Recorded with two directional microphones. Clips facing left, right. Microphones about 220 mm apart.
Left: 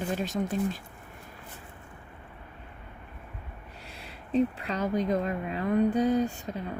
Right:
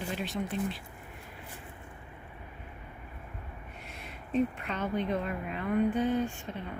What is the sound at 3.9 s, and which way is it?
Speech, 30° left (ahead or behind).